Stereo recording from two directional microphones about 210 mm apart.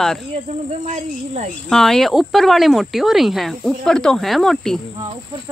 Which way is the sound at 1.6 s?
Centre (ahead or behind).